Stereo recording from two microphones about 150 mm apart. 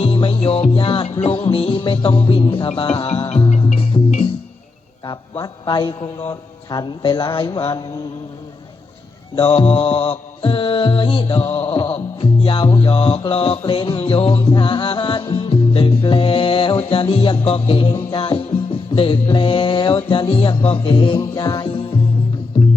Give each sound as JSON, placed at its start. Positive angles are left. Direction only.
{"t": 0.0, "sound": "music", "side_deg": 35}
{"t": 5.4, "sound": "music", "side_deg": 30}
{"t": 9.3, "sound": "music", "side_deg": 35}